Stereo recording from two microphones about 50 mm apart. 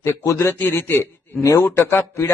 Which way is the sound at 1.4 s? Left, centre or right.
Left.